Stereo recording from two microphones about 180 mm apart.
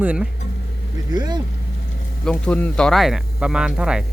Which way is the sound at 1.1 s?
25° right (ahead or behind).